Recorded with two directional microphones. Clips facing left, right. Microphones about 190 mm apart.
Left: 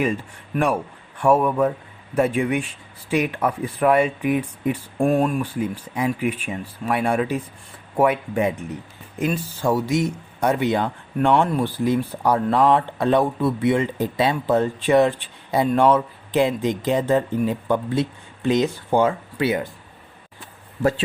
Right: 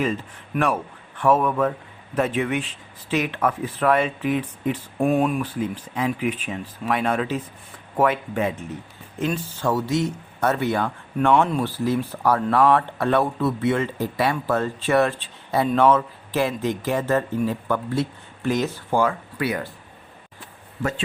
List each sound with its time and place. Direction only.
1.2 s speech: 10° left (ahead or behind)
5.0 s speech: 5° right (ahead or behind)
5.4 s speech: 10° left (ahead or behind); by 19.6 s 25° left (ahead or behind)